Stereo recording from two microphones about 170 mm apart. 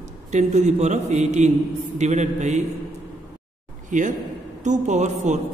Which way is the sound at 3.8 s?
45° right (ahead or behind).